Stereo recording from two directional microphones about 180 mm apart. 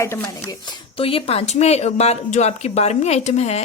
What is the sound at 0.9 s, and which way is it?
Speech, 30° left (ahead or behind).